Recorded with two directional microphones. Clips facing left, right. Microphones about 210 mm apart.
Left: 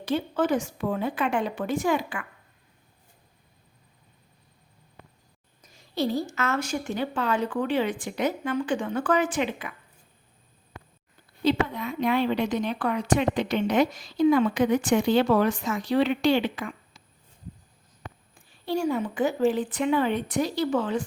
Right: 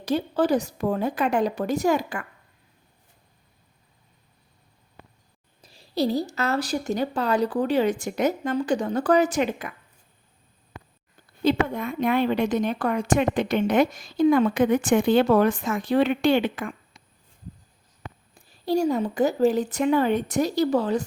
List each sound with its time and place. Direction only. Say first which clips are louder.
0.0 s speech: right 2 dB; 40° right (ahead or behind)
5.6 s speech: right 3 dB; 35° right (ahead or behind)
11.4 s a woman's voice: right 2 dB; 50° right (ahead or behind)
18.3 s speech: right 5 dB; 40° right (ahead or behind)